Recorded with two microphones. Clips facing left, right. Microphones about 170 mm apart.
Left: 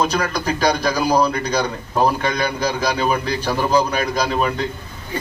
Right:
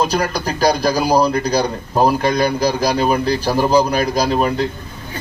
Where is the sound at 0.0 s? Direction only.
35° right (ahead or behind).